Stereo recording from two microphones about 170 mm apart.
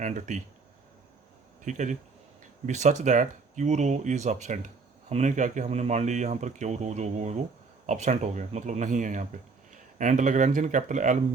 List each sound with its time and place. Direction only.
0.0 s speech: 45° right (ahead or behind)
1.6 s speech: 45° right (ahead or behind)